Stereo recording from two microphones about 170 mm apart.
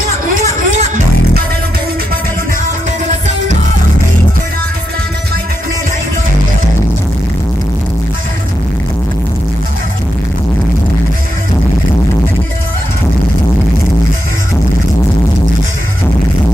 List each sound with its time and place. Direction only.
0.6 s music: 45° right (ahead or behind)